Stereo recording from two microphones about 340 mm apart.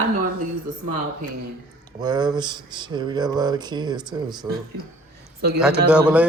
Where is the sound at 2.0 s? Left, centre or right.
Centre.